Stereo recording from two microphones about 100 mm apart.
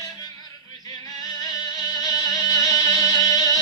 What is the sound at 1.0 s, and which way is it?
Music, 40° left (ahead or behind).